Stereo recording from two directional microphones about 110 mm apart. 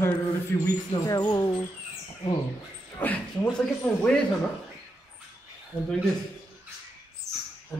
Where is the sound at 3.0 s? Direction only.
15° left (ahead or behind).